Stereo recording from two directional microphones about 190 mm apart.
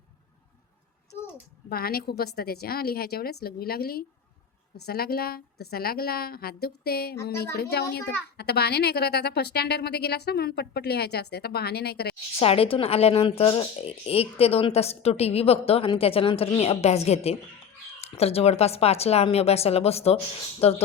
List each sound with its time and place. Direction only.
1.7 s a woman's voice: 55° left (ahead or behind)
12.4 s speech: 30° left (ahead or behind)